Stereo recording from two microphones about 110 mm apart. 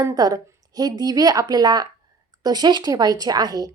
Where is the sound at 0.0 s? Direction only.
35° right (ahead or behind).